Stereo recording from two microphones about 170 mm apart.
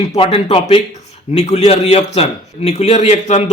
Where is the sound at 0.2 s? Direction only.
35° left (ahead or behind).